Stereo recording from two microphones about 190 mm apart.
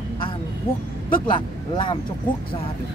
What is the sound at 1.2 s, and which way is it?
Speech, 25° left (ahead or behind).